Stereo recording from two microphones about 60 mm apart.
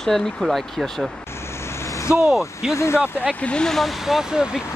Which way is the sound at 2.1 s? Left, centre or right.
Centre.